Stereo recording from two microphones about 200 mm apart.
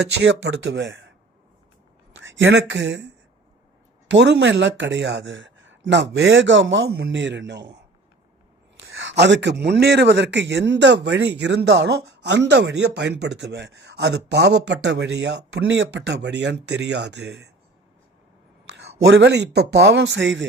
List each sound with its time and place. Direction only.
0.2 s speech: 60° right (ahead or behind)
2.1 s speech: 70° right (ahead or behind)
4.1 s speech: 60° right (ahead or behind)
9.0 s speech: 60° right (ahead or behind)
18.7 s speech: 60° right (ahead or behind)